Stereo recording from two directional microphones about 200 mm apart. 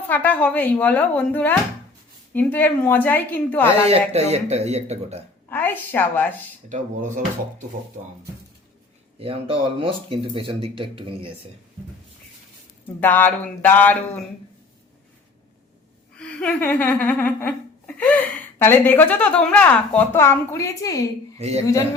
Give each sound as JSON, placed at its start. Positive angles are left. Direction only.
{"t": 0.1, "sound": "speech", "side_deg": 10}
{"t": 3.8, "sound": "speech", "side_deg": -30}
{"t": 5.5, "sound": "a sound", "side_deg": 10}
{"t": 5.9, "sound": "speech", "side_deg": 10}
{"t": 6.7, "sound": "speech", "side_deg": -40}
{"t": 9.1, "sound": "speech", "side_deg": -30}
{"t": 13.0, "sound": "speech", "side_deg": 10}
{"t": 16.1, "sound": "speech", "side_deg": 5}
{"t": 21.3, "sound": "a woman's voice", "side_deg": -30}